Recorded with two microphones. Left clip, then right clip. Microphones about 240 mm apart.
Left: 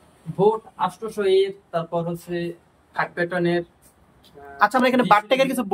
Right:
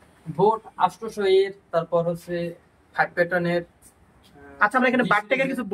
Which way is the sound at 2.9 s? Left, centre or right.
Centre.